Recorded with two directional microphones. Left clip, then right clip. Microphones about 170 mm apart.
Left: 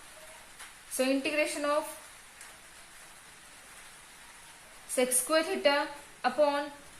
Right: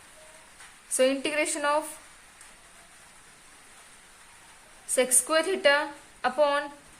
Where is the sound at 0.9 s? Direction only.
55° right (ahead or behind).